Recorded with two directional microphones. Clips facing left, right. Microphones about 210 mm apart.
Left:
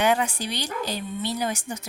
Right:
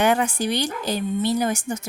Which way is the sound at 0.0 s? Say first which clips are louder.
Right 3 dB; 50° right (ahead or behind).